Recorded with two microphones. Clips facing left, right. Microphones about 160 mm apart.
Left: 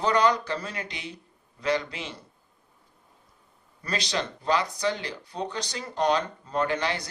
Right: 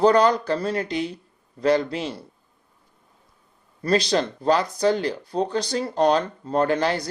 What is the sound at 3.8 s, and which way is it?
Speech, 40° right (ahead or behind).